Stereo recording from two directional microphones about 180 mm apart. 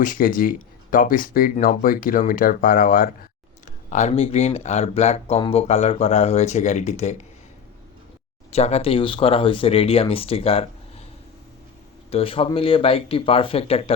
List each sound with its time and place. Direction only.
0.0 s speech: 50° left (ahead or behind)
3.8 s speech: 40° left (ahead or behind)
8.5 s speech: 35° left (ahead or behind)
12.1 s speech: 30° left (ahead or behind)